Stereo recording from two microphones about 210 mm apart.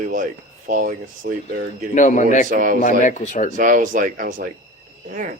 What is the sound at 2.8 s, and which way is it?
Speech, 40° left (ahead or behind).